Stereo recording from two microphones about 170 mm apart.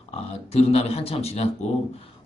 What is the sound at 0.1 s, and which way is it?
Speech, 40° left (ahead or behind).